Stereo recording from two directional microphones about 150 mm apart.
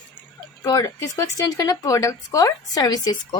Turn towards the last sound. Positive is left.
turn(degrees=25)  # may be behind; listen again after turning